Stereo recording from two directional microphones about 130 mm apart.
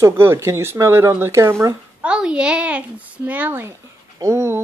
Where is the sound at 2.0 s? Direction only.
10° right (ahead or behind).